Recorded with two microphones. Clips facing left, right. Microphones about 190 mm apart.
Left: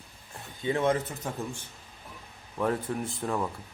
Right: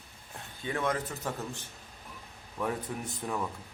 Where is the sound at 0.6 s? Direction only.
25° left (ahead or behind).